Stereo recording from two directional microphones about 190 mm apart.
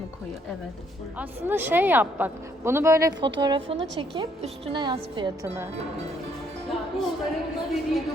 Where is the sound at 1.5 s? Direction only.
10° right (ahead or behind).